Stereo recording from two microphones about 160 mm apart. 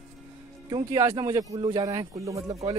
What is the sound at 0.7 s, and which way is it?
A man's voice, 20° right (ahead or behind).